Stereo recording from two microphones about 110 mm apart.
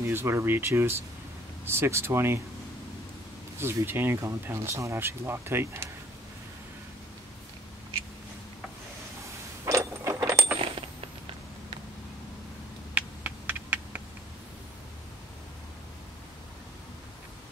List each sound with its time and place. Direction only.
0.0 s speech: 20° right (ahead or behind)
3.5 s speech: 20° right (ahead or behind)
9.7 s keys jangling: 25° right (ahead or behind)
12.9 s a sound: 15° right (ahead or behind)